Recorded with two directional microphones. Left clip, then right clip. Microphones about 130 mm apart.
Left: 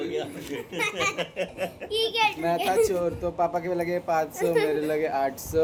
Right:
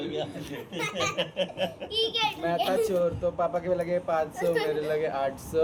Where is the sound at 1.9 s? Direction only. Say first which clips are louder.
Left 4 dB; 20° left (ahead or behind).